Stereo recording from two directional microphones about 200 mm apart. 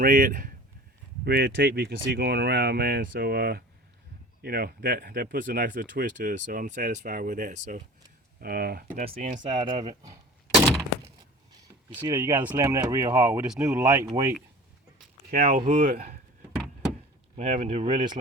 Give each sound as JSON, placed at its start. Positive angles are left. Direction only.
{"t": 0.0, "sound": "speech", "side_deg": -45}
{"t": 8.4, "sound": "speech", "side_deg": -50}
{"t": 9.1, "sound": "speech", "side_deg": -40}
{"t": 9.6, "sound": "speech", "side_deg": -20}
{"t": 12.0, "sound": "speech", "side_deg": -10}
{"t": 15.3, "sound": "speech", "side_deg": -45}
{"t": 17.3, "sound": "speech", "side_deg": -30}